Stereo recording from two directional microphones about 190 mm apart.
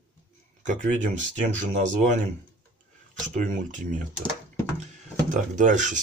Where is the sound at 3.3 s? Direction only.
40° right (ahead or behind).